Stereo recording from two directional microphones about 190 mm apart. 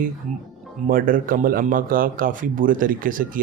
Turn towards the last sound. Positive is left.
turn(degrees=-45)  # may be behind; listen again after turning